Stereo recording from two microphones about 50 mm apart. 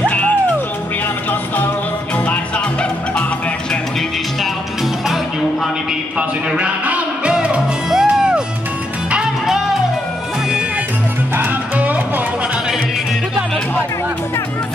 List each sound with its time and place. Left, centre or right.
6.1 s music: right
11.7 s music: right